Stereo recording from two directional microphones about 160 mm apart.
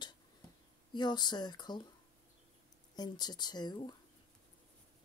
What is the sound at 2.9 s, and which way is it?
Speech, 25° left (ahead or behind).